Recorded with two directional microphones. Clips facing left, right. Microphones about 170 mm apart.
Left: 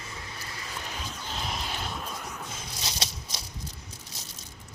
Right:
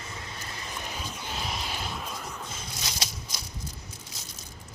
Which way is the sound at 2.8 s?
30° left (ahead or behind).